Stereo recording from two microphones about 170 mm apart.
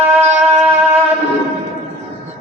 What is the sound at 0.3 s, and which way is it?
Music, 45° right (ahead or behind).